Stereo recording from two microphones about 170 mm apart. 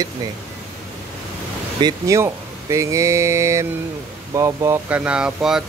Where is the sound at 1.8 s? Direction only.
20° right (ahead or behind).